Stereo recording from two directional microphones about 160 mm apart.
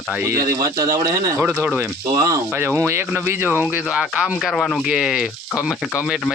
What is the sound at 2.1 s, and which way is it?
Speech, 20° right (ahead or behind).